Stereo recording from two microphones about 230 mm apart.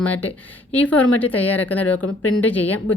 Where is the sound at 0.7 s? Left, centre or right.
Centre.